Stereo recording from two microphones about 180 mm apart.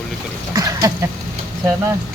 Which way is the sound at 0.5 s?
20° right (ahead or behind).